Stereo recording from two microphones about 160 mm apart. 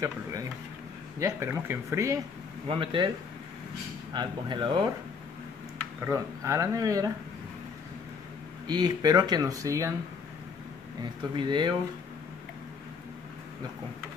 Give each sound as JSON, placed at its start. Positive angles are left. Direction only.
{"t": 0.0, "sound": "speech", "side_deg": -20}
{"t": 2.7, "sound": "speech", "side_deg": -35}
{"t": 4.1, "sound": "speech", "side_deg": -30}
{"t": 6.0, "sound": "speech", "side_deg": -20}
{"t": 8.6, "sound": "speech", "side_deg": -25}
{"t": 11.3, "sound": "speech", "side_deg": -30}